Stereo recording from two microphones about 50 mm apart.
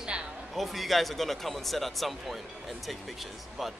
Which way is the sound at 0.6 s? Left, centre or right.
Centre.